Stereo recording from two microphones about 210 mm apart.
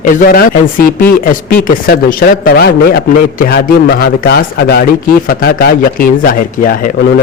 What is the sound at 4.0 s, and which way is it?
Speech, 50° left (ahead or behind).